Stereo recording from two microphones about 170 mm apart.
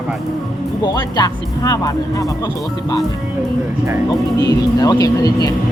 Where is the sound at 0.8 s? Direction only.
25° left (ahead or behind).